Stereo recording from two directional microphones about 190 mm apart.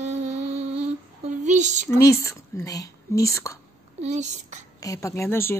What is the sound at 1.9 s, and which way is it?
Speech, 15° left (ahead or behind).